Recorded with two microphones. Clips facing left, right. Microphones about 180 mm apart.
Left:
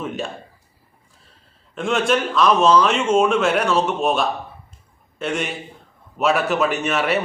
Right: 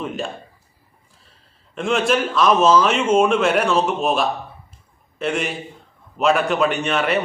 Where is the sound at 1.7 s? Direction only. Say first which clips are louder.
Even; centre (ahead or behind).